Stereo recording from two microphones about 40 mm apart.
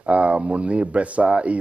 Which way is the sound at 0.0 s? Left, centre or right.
Right.